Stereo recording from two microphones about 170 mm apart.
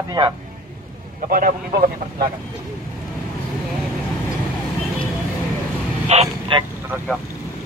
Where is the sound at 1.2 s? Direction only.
50° right (ahead or behind).